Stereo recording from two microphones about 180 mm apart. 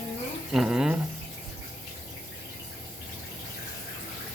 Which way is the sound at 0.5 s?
5° right (ahead or behind).